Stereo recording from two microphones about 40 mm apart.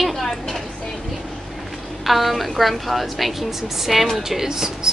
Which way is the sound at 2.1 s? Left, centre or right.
Centre.